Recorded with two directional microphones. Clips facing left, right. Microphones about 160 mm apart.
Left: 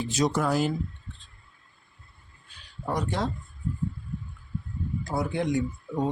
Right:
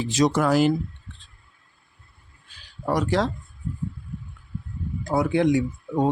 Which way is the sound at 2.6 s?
90° right.